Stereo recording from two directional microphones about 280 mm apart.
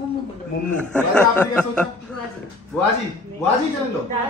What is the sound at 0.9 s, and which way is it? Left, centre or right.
Speech, centre.